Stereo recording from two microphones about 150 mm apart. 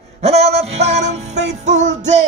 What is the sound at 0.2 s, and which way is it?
Music, 45° right (ahead or behind).